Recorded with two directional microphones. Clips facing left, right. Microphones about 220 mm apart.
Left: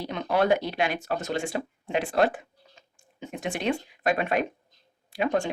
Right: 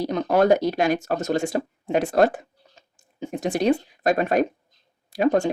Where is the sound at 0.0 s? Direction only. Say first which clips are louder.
Right 6 dB; 40° right (ahead or behind).